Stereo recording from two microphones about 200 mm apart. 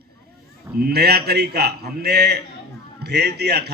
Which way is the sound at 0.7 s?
50° right (ahead or behind).